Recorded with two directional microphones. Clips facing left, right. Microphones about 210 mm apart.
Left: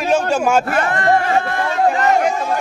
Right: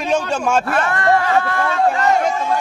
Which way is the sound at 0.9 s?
25° left (ahead or behind).